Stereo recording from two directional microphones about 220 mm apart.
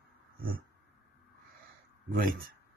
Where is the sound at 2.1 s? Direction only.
40° right (ahead or behind).